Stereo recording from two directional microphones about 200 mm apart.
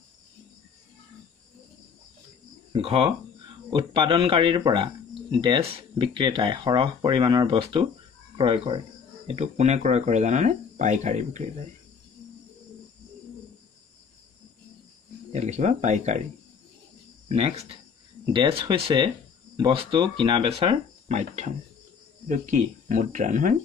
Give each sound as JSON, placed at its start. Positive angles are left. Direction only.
{"t": 2.7, "sound": "speech", "side_deg": -30}
{"t": 15.3, "sound": "speech", "side_deg": -35}
{"t": 17.3, "sound": "speech", "side_deg": -30}